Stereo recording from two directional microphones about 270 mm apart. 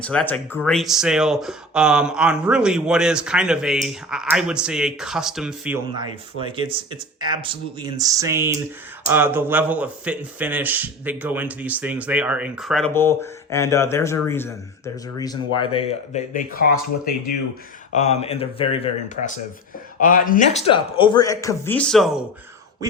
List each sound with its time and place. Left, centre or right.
0.0 s speech: centre
6.4 s speech: centre; by 16.4 s left
17.9 s speech: left; by 22.2 s centre
22.8 s speech: centre